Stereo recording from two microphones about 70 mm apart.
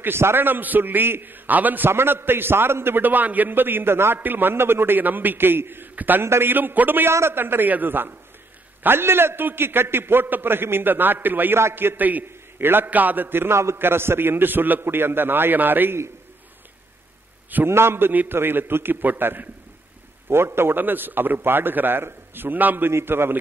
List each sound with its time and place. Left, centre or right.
0.0 s a man's voice: right
17.6 s a man's voice: right